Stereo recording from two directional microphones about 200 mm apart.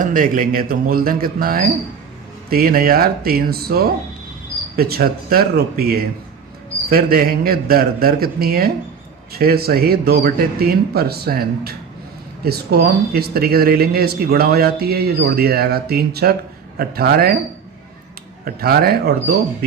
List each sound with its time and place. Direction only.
0.0 s speech: 45° right (ahead or behind)
18.4 s speech: 50° right (ahead or behind)